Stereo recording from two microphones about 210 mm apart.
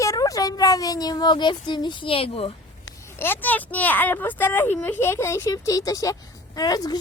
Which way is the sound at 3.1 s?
10° left (ahead or behind).